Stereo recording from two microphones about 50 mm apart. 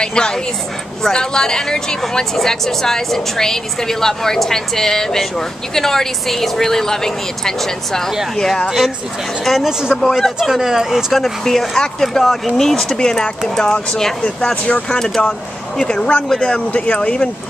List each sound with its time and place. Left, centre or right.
0.0 s a woman's voice: centre
8.6 s speech: centre
9.7 s speech: centre
9.9 s speech: centre
10.5 s speech: centre
11.4 s a woman's voice: centre
14.5 s speech: left
14.9 s a woman's voice: centre
16.4 s speech: left